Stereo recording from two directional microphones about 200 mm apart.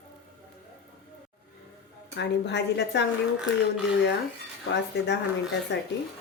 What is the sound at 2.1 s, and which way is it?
Speech, 60° left (ahead or behind).